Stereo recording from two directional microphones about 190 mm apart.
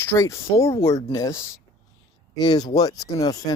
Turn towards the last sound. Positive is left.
turn(degrees=20)  # may be behind; listen again after turning